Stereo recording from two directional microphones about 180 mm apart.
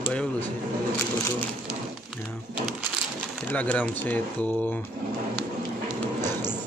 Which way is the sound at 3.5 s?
10° left (ahead or behind).